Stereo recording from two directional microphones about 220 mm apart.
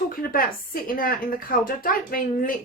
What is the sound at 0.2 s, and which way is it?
A woman's voice, 40° left (ahead or behind).